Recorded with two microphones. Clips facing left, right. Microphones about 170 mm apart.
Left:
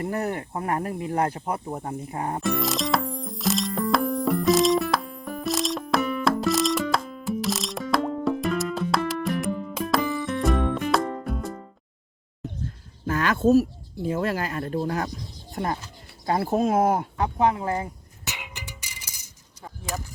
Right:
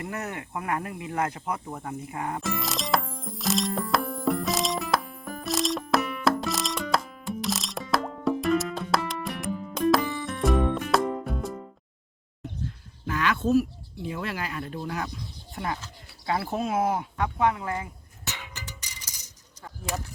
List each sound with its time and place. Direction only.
0.0 s speech: 35° left (ahead or behind)
2.4 s music: centre (ahead or behind)
13.1 s a sound: 45° left (ahead or behind)
14.0 s speech: 40° left (ahead or behind)
17.2 s speech: 30° left (ahead or behind)
18.3 s a sound: 15° left (ahead or behind)